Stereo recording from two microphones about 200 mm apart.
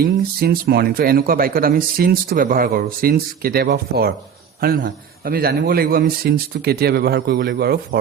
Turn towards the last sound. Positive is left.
turn(degrees=-55)  # may be behind; listen again after turning